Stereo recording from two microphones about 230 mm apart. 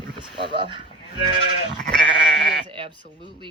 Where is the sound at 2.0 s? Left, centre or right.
Right.